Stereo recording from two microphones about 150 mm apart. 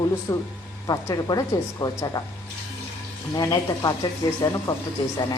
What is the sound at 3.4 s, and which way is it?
Speech, 25° left (ahead or behind).